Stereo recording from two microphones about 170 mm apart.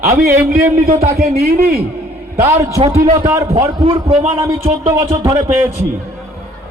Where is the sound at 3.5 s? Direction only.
30° right (ahead or behind).